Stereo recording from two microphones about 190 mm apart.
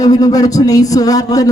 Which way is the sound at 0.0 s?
20° left (ahead or behind).